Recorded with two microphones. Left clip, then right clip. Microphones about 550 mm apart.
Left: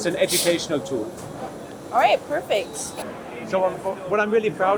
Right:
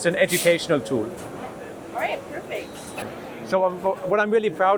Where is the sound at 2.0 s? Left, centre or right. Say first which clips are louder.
Left 8 dB; left.